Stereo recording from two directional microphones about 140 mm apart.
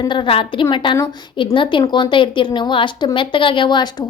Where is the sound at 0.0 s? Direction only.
35° left (ahead or behind).